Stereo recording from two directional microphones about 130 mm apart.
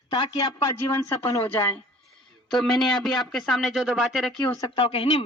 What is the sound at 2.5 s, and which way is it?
Speech, 5° left (ahead or behind).